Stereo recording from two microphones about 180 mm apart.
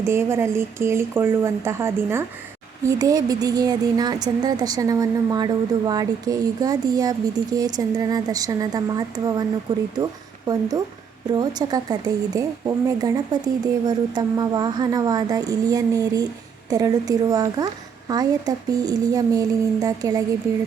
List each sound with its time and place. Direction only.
0.0 s speech: 15° right (ahead or behind)